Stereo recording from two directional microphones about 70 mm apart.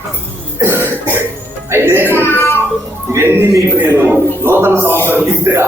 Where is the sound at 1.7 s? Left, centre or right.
Right.